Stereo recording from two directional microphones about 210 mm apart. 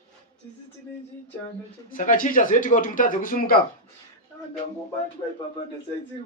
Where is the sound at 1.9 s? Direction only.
40° left (ahead or behind).